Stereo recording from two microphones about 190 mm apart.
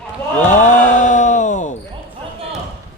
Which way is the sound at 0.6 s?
40° left (ahead or behind).